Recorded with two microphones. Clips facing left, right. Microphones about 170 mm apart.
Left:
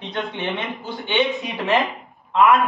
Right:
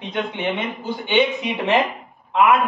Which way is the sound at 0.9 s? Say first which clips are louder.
Right 3 dB; 20° right (ahead or behind).